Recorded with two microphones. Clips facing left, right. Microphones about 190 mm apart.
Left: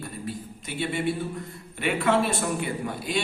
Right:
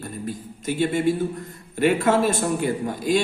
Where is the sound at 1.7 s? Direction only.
40° right (ahead or behind).